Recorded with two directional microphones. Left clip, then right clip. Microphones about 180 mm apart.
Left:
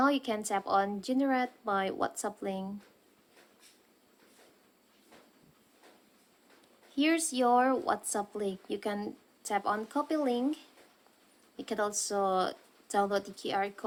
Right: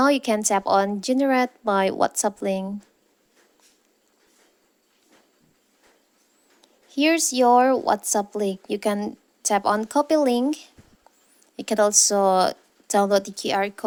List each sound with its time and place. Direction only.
0.0 s a woman's voice: 45° right (ahead or behind)
6.9 s a woman's voice: 40° right (ahead or behind)
11.5 s a woman's voice: 50° right (ahead or behind)